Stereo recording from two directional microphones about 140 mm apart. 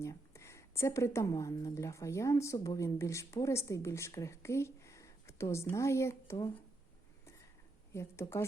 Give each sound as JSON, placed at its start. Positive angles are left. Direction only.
{"t": 0.0, "sound": "a woman's voice", "side_deg": 20}
{"t": 7.9, "sound": "a woman's voice", "side_deg": 20}